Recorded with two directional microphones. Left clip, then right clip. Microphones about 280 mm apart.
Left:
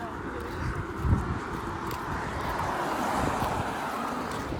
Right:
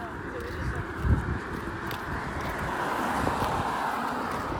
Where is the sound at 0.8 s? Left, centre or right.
Centre.